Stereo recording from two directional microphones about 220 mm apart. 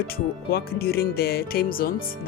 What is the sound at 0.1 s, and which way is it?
Speech, 45° left (ahead or behind).